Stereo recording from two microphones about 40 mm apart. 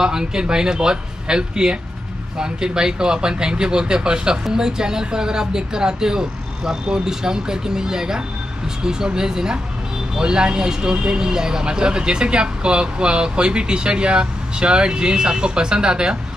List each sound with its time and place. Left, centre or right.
0.0 s a woman's voice: centre